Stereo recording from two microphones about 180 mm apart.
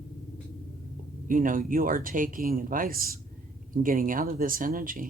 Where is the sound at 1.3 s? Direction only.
50° right (ahead or behind).